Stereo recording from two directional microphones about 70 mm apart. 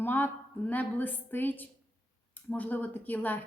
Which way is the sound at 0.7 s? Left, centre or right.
Left.